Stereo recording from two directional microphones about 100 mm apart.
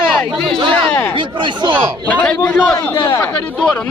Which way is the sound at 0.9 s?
15° left (ahead or behind).